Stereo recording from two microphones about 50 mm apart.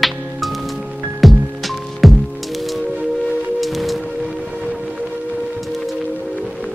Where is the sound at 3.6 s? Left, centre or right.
Centre.